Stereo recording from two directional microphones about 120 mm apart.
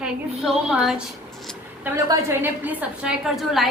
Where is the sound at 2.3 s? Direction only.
15° right (ahead or behind).